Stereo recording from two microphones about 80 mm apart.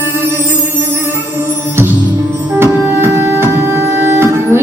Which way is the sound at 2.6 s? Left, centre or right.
Right.